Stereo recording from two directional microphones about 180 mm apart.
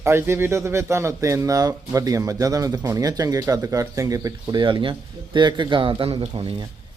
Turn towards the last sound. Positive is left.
turn(degrees=-25)  # may be behind; listen again after turning